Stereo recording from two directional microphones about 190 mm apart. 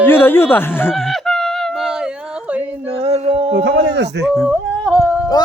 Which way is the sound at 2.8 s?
30° right (ahead or behind).